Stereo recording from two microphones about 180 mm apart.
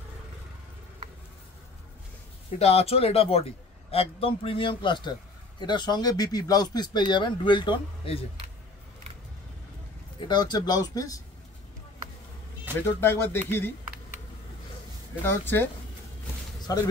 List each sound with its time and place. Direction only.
2.6 s speech: 35° left (ahead or behind)
10.2 s speech: 25° left (ahead or behind)
12.8 s speech: 15° left (ahead or behind)
15.2 s speech: 10° left (ahead or behind)